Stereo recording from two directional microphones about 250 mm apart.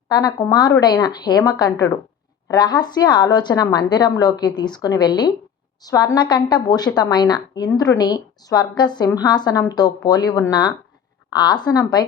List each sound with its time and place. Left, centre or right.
0.1 s a woman's voice: centre